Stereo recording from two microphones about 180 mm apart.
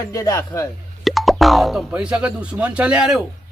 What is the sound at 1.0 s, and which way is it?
Speech, centre (ahead or behind).